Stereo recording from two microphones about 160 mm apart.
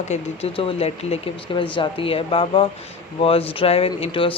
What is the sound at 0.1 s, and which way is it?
Speech, 40° left (ahead or behind).